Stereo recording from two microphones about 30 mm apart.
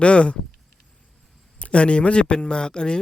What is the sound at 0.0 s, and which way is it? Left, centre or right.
Speech, left.